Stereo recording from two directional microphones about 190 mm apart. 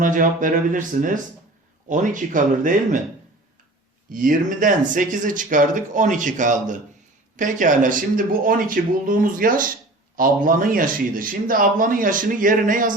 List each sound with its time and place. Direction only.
0.0 s a man's voice: 45° right (ahead or behind)
4.1 s a man's voice: 45° right (ahead or behind)